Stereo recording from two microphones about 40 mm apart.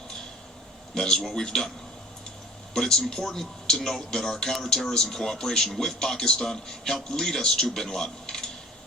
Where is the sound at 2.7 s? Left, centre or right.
Centre.